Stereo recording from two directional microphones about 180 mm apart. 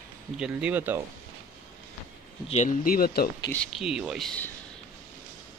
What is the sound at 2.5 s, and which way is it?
Speech, 45° left (ahead or behind).